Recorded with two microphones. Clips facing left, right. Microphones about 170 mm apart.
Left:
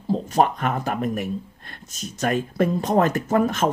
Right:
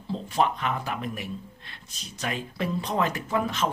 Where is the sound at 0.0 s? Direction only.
45° left (ahead or behind).